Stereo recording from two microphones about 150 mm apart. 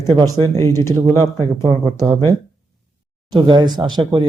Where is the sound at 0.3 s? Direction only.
20° left (ahead or behind).